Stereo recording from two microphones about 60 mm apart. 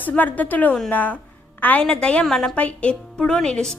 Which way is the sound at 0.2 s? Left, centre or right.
Left.